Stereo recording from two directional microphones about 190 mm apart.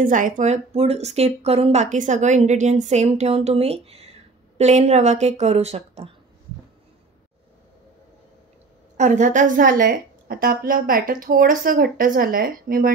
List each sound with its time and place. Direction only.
0.0 s speech: 45° right (ahead or behind)
8.9 s a woman's voice: 40° right (ahead or behind)